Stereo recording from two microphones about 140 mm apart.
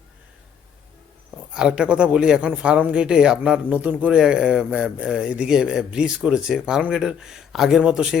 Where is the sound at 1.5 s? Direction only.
5° right (ahead or behind).